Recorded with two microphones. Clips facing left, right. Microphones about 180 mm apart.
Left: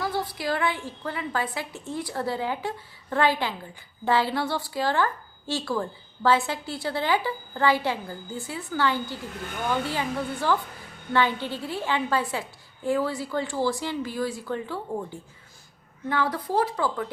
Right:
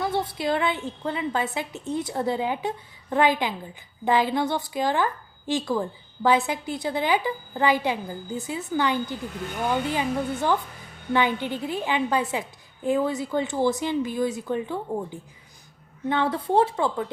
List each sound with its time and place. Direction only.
0.0 s a woman's voice: 25° right (ahead or behind)